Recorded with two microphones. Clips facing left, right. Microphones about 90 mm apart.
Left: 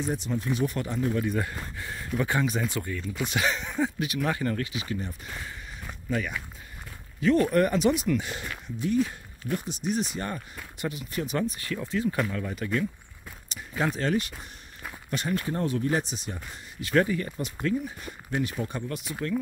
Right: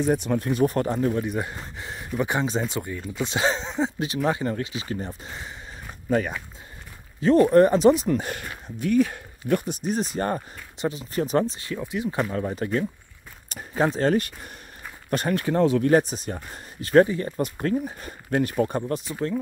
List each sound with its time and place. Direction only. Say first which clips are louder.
0.0 s speech: right 7 dB; 60° right (ahead or behind); by 1.1 s 40° right (ahead or behind)
1.1 s speech: right 1 dB; 20° right (ahead or behind)
4.8 s speech: right 2 dB; 35° right (ahead or behind)
8.3 s speech: right 2 dB; 50° right (ahead or behind)
9.8 s speech: right 3 dB; 40° right (ahead or behind)
10.8 s speech: right 6 dB; 30° right (ahead or behind)
12.3 s speech: right 4 dB; 35° right (ahead or behind); by 15.3 s 50° right (ahead or behind)
15.3 s speech: right 8 dB; 85° right
15.9 s speech: right 9 dB; 45° right (ahead or behind)
17.4 s speech: right 4 dB; 45° right (ahead or behind)